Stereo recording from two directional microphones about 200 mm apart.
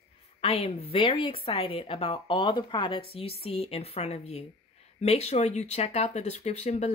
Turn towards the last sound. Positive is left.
turn(degrees=35)  # may be behind; listen again after turning